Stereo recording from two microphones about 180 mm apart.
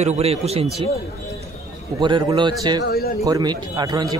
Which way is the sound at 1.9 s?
25° right (ahead or behind).